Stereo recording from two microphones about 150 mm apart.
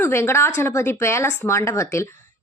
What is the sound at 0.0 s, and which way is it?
A woman's voice, 15° left (ahead or behind).